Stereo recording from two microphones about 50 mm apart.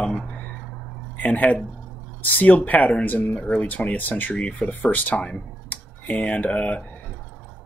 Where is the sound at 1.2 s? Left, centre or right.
Left.